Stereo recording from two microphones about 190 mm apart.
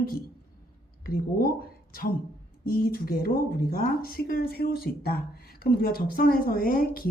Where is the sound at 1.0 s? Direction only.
50° left (ahead or behind).